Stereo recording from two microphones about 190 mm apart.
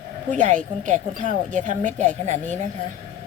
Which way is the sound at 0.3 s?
40° right (ahead or behind).